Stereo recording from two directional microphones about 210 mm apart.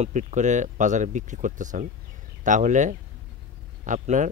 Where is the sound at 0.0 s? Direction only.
35° right (ahead or behind).